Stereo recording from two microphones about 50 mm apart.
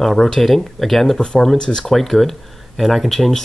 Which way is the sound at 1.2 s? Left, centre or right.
Centre.